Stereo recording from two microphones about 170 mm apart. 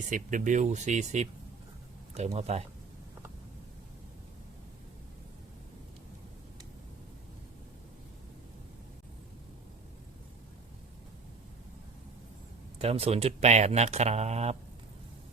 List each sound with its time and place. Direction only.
0.1 s speech: 50° right (ahead or behind)
12.8 s speech: 35° right (ahead or behind)